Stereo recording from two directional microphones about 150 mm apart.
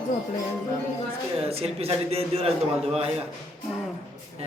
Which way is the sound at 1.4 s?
40° right (ahead or behind).